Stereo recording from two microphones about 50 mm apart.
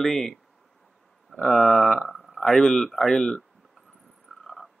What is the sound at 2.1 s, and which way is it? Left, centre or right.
Speech, centre.